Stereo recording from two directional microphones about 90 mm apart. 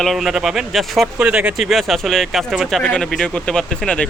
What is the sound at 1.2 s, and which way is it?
Speech, 15° right (ahead or behind).